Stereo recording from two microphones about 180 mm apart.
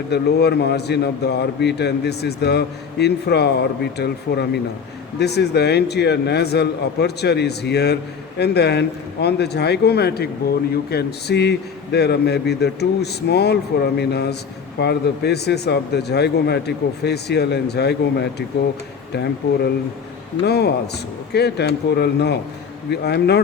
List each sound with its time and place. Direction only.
0.1 s a man's voice: 65° left (ahead or behind)
20.4 s speech: 65° left (ahead or behind)